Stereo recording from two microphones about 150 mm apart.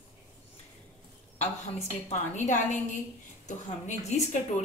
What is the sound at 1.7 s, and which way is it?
A woman's voice, 50° left (ahead or behind).